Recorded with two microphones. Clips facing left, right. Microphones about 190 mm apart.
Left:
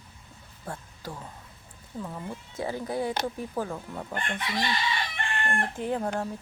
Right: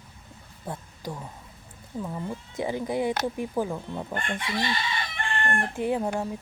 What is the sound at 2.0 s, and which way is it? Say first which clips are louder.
Speech: right 4 dB; 10° right (ahead or behind).